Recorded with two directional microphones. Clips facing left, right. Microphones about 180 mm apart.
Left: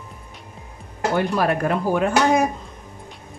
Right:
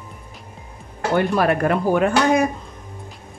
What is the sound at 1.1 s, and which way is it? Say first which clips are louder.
A woman's voice: right 3 dB; 60° right (ahead or behind).